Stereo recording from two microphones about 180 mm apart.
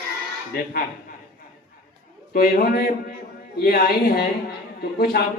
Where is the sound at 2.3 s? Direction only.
55° left (ahead or behind).